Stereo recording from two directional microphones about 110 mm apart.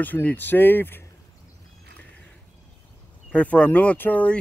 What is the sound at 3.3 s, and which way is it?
Speech, 10° left (ahead or behind).